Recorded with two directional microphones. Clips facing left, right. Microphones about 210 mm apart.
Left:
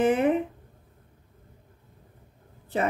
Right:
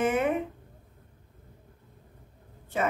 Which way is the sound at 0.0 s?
35° left (ahead or behind).